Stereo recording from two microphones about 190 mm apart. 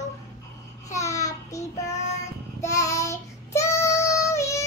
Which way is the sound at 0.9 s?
15° left (ahead or behind).